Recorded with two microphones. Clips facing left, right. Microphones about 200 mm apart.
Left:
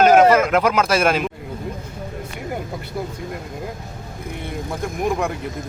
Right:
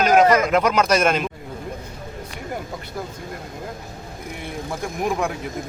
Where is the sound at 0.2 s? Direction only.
5° left (ahead or behind).